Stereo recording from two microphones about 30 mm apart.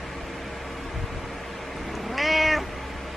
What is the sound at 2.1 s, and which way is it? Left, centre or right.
Cat, centre.